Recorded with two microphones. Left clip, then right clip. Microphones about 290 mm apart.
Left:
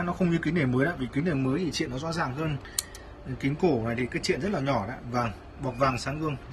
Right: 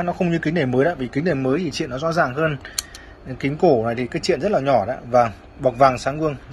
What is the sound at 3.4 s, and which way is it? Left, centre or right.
Speech, centre.